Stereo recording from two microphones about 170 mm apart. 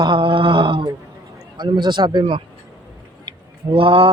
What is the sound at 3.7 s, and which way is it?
Mantra, 30° right (ahead or behind).